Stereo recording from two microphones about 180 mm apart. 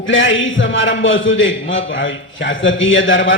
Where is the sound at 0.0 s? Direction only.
90° left.